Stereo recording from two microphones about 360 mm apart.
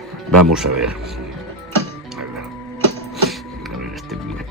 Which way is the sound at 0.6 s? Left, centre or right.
Right.